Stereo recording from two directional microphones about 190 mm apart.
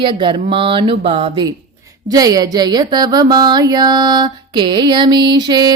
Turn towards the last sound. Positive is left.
turn(degrees=-25)  # may be behind; listen again after turning